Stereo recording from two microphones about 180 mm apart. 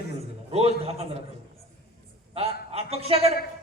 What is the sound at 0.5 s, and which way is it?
Speech, 35° right (ahead or behind).